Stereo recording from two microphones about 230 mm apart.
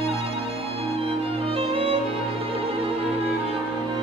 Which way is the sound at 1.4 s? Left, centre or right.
Right.